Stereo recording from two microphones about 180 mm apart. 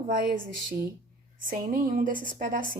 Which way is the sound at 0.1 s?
55° right (ahead or behind).